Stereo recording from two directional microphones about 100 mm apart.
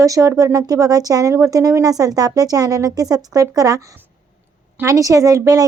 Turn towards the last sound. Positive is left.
turn(degrees=-35)  # may be behind; listen again after turning